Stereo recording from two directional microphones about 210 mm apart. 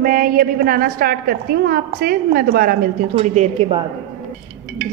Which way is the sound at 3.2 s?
30° right (ahead or behind).